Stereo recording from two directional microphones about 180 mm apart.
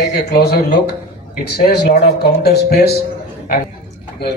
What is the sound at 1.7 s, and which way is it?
Speech, 65° left (ahead or behind).